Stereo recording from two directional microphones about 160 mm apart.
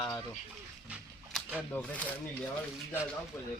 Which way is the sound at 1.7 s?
10° left (ahead or behind).